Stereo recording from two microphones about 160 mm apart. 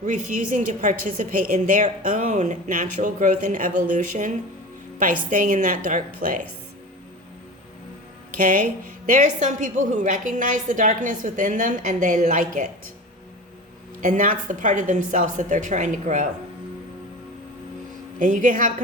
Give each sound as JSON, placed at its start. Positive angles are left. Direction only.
{"t": 0.0, "sound": "a woman's voice", "side_deg": -55}
{"t": 8.4, "sound": "a woman's voice", "side_deg": -60}
{"t": 14.0, "sound": "a woman's voice", "side_deg": -55}
{"t": 18.2, "sound": "a woman's voice", "side_deg": -55}